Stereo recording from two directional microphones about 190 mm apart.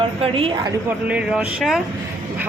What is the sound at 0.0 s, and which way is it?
Speech, 30° right (ahead or behind).